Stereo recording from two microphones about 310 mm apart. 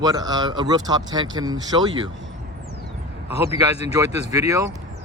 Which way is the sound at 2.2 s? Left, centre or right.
Right.